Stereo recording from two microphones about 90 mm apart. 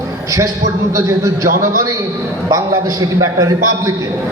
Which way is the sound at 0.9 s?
35° right (ahead or behind).